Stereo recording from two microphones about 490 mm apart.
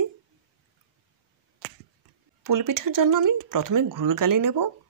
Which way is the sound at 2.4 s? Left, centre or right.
Right.